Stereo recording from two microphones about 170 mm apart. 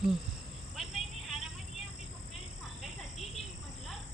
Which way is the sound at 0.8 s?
Centre (ahead or behind).